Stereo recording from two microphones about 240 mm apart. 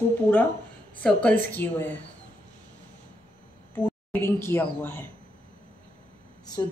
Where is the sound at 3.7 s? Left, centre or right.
Centre.